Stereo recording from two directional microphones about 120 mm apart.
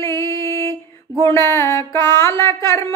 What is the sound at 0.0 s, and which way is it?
Music, 25° left (ahead or behind).